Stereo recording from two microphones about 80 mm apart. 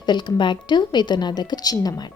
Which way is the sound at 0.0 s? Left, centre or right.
Left.